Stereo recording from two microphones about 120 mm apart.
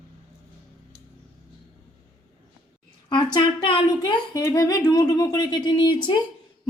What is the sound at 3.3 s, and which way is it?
Speech, 45° left (ahead or behind).